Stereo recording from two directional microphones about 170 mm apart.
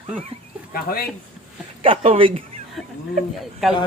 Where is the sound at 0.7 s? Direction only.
60° left (ahead or behind).